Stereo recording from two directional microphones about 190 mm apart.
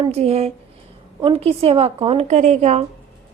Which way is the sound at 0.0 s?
35° right (ahead or behind).